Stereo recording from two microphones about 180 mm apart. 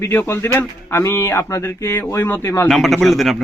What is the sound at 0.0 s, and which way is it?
Speech, 15° left (ahead or behind).